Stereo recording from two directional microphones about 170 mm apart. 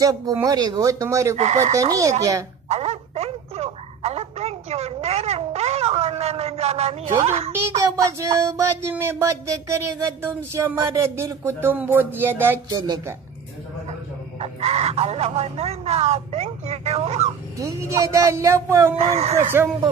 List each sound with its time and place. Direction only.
0.0 s speech: 20° right (ahead or behind)
1.3 s speech: 40° right (ahead or behind)
1.7 s speech: 20° right (ahead or behind)
2.7 s a sound: 35° right (ahead or behind)
7.2 s speech: 35° right (ahead or behind)
7.5 s a sound: 15° right (ahead or behind)
14.4 s speech: 35° right (ahead or behind)
17.6 s a sound: 20° right (ahead or behind)
18.9 s speech: 40° right (ahead or behind)